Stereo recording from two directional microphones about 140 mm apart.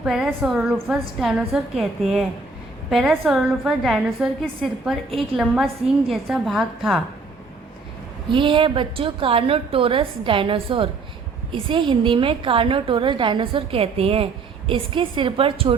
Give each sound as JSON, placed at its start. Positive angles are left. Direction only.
{"t": 0.0, "sound": "a woman's voice", "side_deg": -5}
{"t": 8.3, "sound": "a woman's voice", "side_deg": -40}